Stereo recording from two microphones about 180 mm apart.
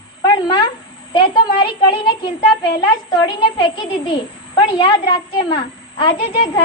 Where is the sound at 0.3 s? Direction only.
25° left (ahead or behind).